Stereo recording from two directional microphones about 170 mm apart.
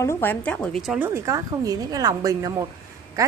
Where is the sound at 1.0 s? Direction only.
15° right (ahead or behind).